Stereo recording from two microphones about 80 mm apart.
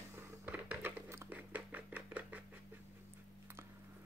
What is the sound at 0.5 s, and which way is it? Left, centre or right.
Music, right.